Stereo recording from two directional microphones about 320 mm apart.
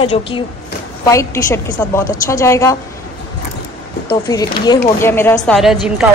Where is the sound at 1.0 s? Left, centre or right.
Centre.